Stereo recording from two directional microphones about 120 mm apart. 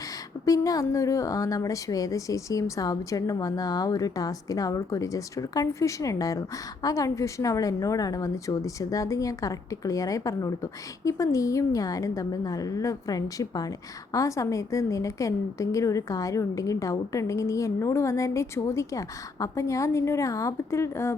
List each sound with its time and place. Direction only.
0.4 s a woman's voice: 30° left (ahead or behind)